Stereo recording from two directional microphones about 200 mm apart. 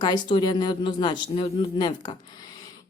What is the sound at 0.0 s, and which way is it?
A woman's voice, 20° left (ahead or behind).